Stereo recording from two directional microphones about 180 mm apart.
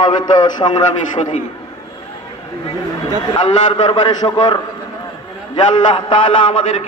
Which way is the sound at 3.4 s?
25° left (ahead or behind).